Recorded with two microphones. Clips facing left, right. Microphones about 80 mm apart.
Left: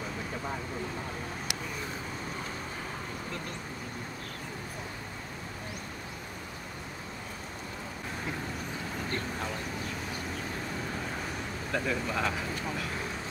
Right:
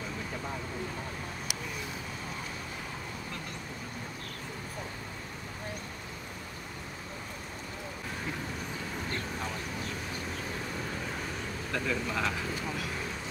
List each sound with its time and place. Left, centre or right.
11.7 s speech: left